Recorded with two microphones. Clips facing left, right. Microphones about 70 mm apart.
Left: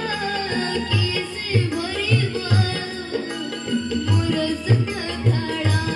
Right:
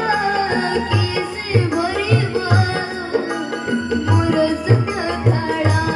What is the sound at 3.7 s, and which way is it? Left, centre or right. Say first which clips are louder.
Tabla: right 4 dB; right.